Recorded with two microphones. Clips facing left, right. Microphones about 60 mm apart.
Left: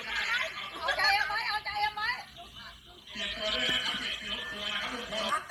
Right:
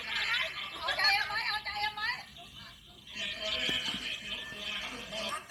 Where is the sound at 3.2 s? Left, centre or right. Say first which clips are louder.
Left 4 dB; left.